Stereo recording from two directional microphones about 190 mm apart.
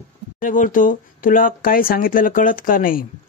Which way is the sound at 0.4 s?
45° left (ahead or behind).